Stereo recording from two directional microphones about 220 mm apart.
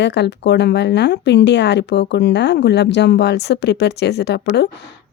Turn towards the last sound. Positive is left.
turn(degrees=50)  # may be behind; listen again after turning